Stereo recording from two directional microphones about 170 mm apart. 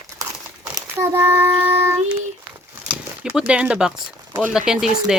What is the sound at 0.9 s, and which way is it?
Child singing, 15° right (ahead or behind).